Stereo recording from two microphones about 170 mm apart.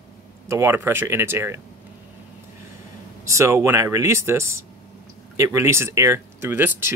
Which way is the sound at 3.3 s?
15° right (ahead or behind).